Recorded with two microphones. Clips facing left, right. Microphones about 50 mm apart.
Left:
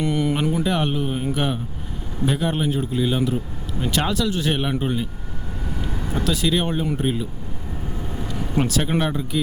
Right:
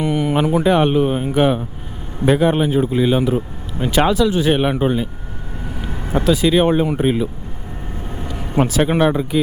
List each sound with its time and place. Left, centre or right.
0.0 s speech: centre
5.7 s vehicle: centre
6.9 s speech: right
8.1 s vehicle: centre
8.8 s speech: right